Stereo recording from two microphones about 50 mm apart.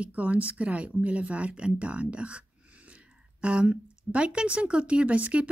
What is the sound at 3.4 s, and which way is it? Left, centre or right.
Speech, right.